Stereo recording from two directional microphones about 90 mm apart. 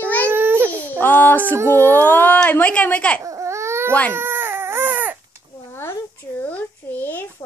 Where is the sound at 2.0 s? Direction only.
20° left (ahead or behind).